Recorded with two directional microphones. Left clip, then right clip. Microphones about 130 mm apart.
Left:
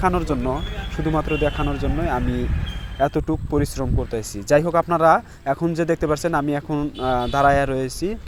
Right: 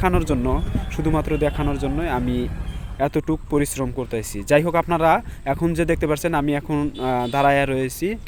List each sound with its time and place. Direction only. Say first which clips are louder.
0.0 s speech: even; 20° right (ahead or behind)